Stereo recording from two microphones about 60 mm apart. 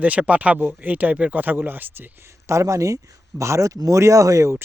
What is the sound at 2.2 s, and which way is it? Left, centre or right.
Speech, right.